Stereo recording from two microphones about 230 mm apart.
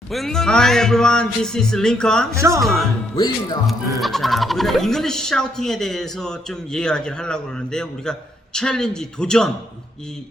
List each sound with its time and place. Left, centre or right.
0.1 s speech: centre
3.2 s speech: centre
4.0 s speech: centre